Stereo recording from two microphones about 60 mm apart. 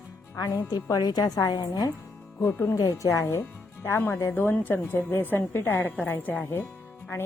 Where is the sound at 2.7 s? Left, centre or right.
Left.